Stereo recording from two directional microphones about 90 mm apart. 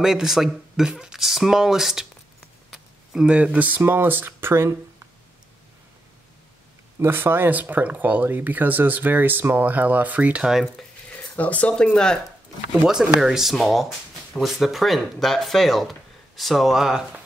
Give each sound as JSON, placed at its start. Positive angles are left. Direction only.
{"t": 0.0, "sound": "speech", "side_deg": -5}
{"t": 7.0, "sound": "speech", "side_deg": -25}
{"t": 11.3, "sound": "speech", "side_deg": 15}
{"t": 12.8, "sound": "speech", "side_deg": -5}